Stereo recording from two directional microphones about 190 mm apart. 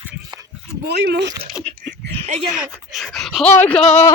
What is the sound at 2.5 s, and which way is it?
Speech, centre (ahead or behind).